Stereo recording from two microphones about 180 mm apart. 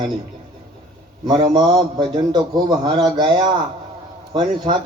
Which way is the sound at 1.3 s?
25° right (ahead or behind).